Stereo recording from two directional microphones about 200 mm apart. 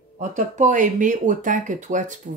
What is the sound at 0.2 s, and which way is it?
A woman's voice, 35° right (ahead or behind).